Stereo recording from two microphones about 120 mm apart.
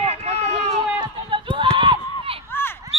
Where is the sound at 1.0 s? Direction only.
45° right (ahead or behind).